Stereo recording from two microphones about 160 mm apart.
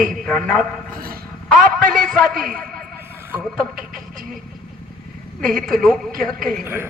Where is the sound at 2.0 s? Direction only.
Centre (ahead or behind).